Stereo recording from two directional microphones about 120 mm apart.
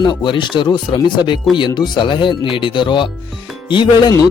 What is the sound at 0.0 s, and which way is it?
Speech, 40° left (ahead or behind).